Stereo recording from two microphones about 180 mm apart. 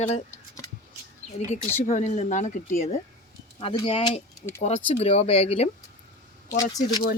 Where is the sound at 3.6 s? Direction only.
30° left (ahead or behind).